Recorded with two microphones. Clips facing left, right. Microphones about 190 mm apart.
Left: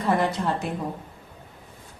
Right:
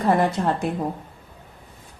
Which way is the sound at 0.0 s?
50° right (ahead or behind).